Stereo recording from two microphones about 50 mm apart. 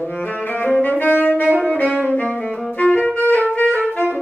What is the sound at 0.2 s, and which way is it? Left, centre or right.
Saxophone, left.